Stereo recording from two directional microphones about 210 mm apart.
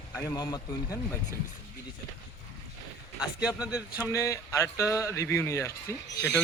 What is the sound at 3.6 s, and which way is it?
Speech, 5° right (ahead or behind).